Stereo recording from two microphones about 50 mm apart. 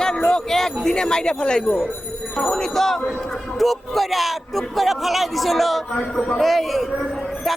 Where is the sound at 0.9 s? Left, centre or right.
Centre.